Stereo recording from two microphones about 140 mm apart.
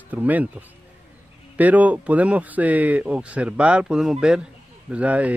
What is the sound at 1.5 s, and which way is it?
Speech, 10° right (ahead or behind).